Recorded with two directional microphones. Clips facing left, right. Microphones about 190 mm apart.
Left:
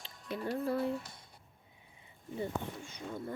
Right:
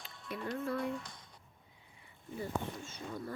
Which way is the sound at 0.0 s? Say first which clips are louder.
Left 3 dB; 30° left (ahead or behind).